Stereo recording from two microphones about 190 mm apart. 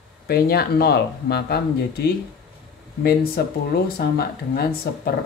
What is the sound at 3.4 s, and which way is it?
Speech, 55° left (ahead or behind).